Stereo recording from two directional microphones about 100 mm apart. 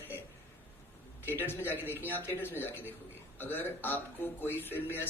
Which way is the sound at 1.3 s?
20° left (ahead or behind).